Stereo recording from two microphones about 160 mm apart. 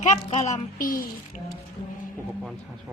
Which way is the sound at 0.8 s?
60° left (ahead or behind).